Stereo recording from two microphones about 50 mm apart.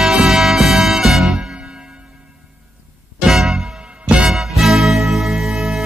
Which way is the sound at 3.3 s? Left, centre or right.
Centre.